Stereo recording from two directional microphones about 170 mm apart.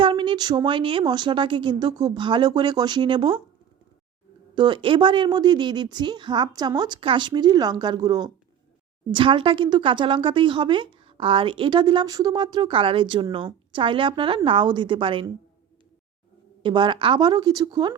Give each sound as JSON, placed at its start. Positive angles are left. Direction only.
{"t": 0.0, "sound": "a woman's voice", "side_deg": -30}
{"t": 4.5, "sound": "a woman's voice", "side_deg": -30}
{"t": 16.6, "sound": "a woman's voice", "side_deg": -25}